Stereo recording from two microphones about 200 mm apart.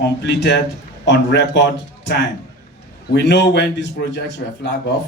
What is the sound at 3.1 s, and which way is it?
Speech, 60° left (ahead or behind).